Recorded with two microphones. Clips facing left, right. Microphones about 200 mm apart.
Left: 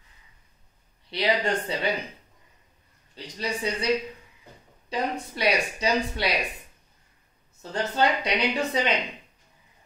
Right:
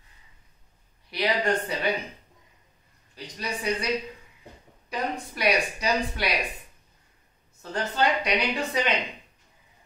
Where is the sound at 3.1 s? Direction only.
25° left (ahead or behind).